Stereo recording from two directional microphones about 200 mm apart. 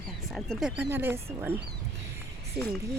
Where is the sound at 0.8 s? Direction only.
10° right (ahead or behind).